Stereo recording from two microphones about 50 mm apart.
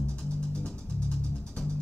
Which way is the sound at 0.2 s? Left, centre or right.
Centre.